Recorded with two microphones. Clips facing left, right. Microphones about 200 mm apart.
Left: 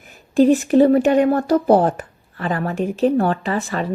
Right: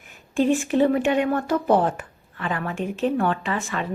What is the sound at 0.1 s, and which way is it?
Speech, 40° left (ahead or behind).